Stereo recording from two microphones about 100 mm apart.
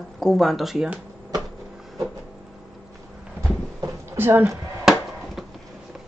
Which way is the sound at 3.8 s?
25° right (ahead or behind).